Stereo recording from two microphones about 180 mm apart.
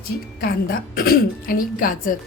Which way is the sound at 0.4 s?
55° left (ahead or behind).